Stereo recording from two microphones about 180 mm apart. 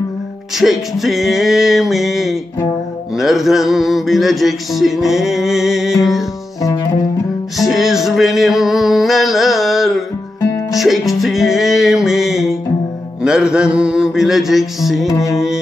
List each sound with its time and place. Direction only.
0.6 s mantra: centre (ahead or behind)
6.6 s music: 20° left (ahead or behind)
7.5 s music: centre (ahead or behind)
13.2 s mantra: 5° right (ahead or behind)
15.0 s music: 20° left (ahead or behind)
15.3 s mantra: 5° right (ahead or behind)